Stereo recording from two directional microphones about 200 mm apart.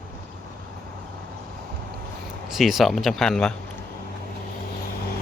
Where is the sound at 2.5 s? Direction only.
Centre (ahead or behind).